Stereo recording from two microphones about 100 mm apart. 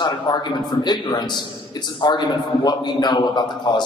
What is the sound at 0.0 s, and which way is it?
A man's voice, 45° left (ahead or behind).